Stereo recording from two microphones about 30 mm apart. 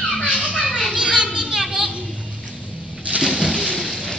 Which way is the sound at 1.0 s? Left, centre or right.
Right.